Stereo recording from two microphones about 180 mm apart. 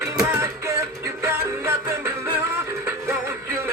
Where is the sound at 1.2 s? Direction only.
15° right (ahead or behind).